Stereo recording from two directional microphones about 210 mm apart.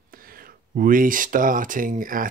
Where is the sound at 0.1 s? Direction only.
45° right (ahead or behind).